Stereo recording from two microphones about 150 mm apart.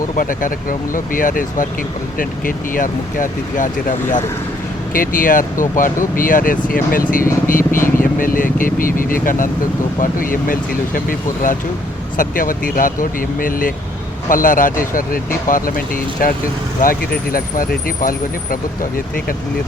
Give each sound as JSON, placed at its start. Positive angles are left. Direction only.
{"t": 0.2, "sound": "speech", "side_deg": 65}
{"t": 4.9, "sound": "speech", "side_deg": 65}
{"t": 12.1, "sound": "speech", "side_deg": 65}